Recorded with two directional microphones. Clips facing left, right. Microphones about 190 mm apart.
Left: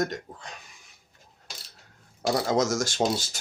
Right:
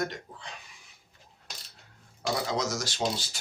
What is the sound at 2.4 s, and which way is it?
Speech, 45° left (ahead or behind).